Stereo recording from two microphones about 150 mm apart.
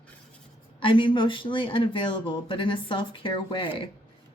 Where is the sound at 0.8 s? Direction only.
35° left (ahead or behind).